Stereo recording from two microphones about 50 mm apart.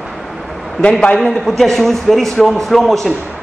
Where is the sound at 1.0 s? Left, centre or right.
Left.